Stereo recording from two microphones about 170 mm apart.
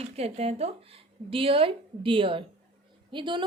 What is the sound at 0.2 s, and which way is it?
A woman's voice, 40° right (ahead or behind).